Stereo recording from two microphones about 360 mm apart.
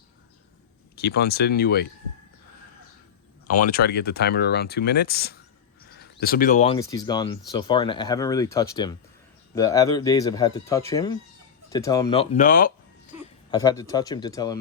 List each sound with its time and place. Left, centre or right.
1.0 s speech: left
3.4 s speech: left
13.5 s speech: centre